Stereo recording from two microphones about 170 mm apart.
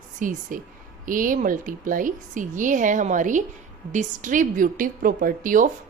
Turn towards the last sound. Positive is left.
turn(degrees=-50)  # may be behind; listen again after turning